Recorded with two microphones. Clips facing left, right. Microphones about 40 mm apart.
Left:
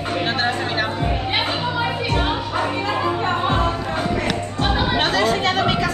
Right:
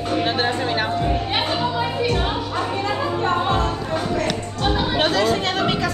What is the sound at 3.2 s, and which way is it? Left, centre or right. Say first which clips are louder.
Music: right 3 dB; centre.